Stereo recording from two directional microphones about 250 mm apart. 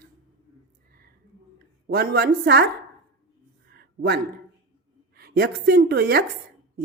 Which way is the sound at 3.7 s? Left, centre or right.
Right.